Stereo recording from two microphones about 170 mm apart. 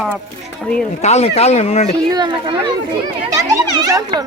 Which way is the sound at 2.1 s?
25° right (ahead or behind).